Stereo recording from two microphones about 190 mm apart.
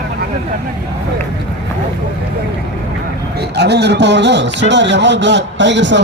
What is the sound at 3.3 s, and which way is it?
Speech, 60° right (ahead or behind).